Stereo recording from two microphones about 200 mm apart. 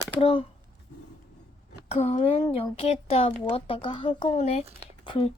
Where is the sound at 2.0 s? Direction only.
30° left (ahead or behind).